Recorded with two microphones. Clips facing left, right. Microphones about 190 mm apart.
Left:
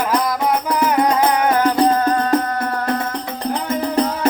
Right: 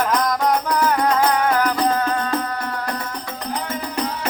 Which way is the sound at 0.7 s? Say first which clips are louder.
Left 2 dB; 20° left (ahead or behind).